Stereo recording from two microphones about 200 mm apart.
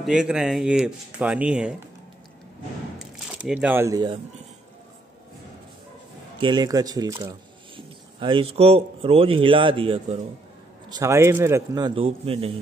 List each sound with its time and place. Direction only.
0.0 s speech: 5° right (ahead or behind)
3.3 s speech: 5° right (ahead or behind); by 4.2 s 20° right (ahead or behind)
6.4 s speech: 20° right (ahead or behind)
10.9 s a man's voice: 15° right (ahead or behind)